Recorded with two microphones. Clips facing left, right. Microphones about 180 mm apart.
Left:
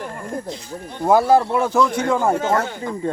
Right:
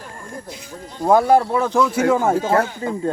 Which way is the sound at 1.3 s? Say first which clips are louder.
Even; 10° right (ahead or behind).